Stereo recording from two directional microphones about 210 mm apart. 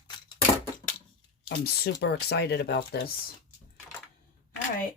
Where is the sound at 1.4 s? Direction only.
50° left (ahead or behind).